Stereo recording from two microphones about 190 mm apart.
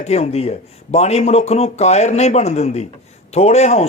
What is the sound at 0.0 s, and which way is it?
Speech, 35° left (ahead or behind).